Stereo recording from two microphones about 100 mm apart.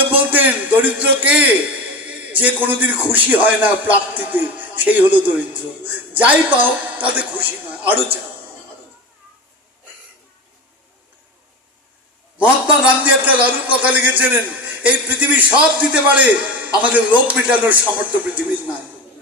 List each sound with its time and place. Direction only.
0.0 s a sound: 20° right (ahead or behind)
2.0 s a man's voice: 15° right (ahead or behind)
12.6 s a man's voice: 15° right (ahead or behind)